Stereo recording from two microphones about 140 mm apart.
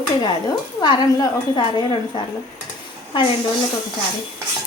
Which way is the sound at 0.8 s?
30° left (ahead or behind).